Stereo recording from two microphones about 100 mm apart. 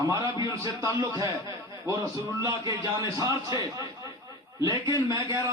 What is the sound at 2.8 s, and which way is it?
A man's voice, 35° right (ahead or behind).